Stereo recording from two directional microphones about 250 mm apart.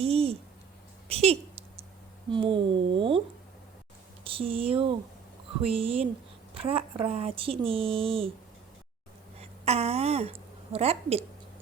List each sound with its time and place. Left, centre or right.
0.0 s a sound: right
1.0 s speech: right
4.4 s speech: right
9.4 s a woman's voice: right